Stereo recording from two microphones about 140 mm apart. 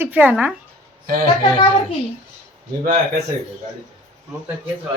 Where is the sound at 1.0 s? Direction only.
90° right.